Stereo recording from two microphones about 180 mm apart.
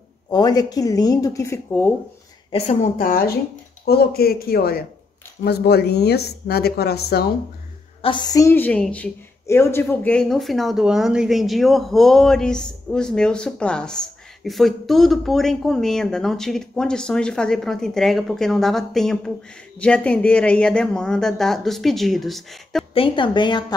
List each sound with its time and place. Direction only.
0.3 s speech: 20° left (ahead or behind)
2.5 s a woman's voice: 35° left (ahead or behind); by 7.3 s 60° left (ahead or behind)
8.0 s a woman's voice: 25° left (ahead or behind); by 22.8 s centre (ahead or behind)
22.9 s speech: 30° left (ahead or behind)